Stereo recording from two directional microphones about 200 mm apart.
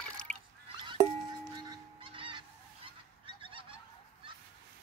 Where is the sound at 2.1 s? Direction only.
25° right (ahead or behind).